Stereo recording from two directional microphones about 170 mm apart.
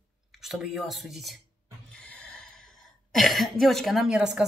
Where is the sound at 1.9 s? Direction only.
5° left (ahead or behind).